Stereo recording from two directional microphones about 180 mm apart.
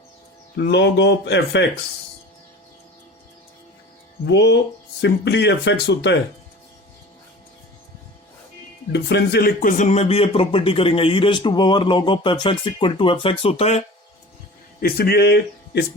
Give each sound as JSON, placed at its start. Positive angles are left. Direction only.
{"t": 0.5, "sound": "speech", "side_deg": 70}
{"t": 4.3, "sound": "speech", "side_deg": 70}
{"t": 8.9, "sound": "speech", "side_deg": 65}
{"t": 14.8, "sound": "speech", "side_deg": 55}